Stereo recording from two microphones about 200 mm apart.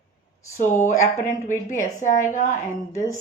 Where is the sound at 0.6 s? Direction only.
40° left (ahead or behind).